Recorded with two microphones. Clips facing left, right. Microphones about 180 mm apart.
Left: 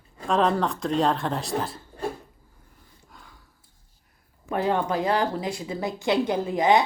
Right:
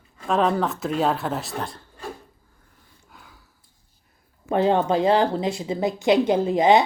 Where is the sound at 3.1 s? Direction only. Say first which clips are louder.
Right 1 dB; 5° right (ahead or behind).